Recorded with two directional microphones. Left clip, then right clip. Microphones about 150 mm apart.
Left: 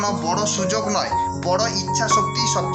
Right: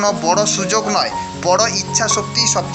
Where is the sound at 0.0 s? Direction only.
40° right (ahead or behind).